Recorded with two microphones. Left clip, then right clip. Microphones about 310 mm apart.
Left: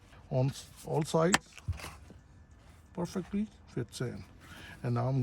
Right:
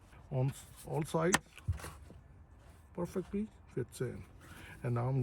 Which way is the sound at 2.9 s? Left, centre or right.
Centre.